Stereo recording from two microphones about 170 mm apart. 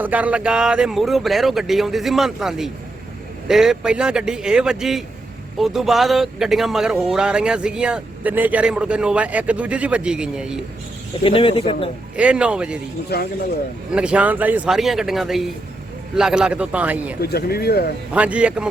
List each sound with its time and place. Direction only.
0.0 s speech: 10° right (ahead or behind)
11.2 s speech: 30° left (ahead or behind)
12.1 s a man's voice: 5° right (ahead or behind)
13.1 s speech: 70° left (ahead or behind)
13.9 s a man's voice: 5° right (ahead or behind)
17.2 s speech: 70° left (ahead or behind)
18.1 s a man's voice: 10° right (ahead or behind)